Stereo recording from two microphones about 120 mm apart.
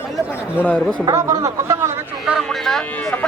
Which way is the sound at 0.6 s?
15° left (ahead or behind).